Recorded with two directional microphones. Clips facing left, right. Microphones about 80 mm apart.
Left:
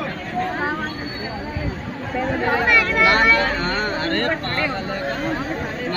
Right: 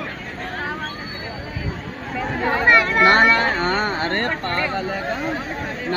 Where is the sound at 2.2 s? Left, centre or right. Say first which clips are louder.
Left 1 dB; centre.